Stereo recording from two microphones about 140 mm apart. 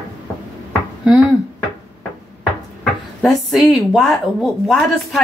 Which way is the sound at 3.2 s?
Centre (ahead or behind).